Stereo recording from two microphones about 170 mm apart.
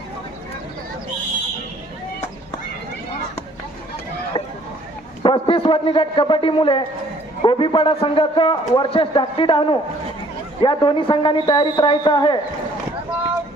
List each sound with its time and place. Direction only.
5.2 s a man's voice: 30° left (ahead or behind)